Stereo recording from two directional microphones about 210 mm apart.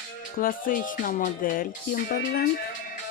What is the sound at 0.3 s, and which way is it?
Music, 40° left (ahead or behind).